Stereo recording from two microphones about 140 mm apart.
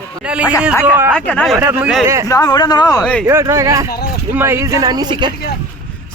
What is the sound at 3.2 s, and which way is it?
Speech, 20° right (ahead or behind).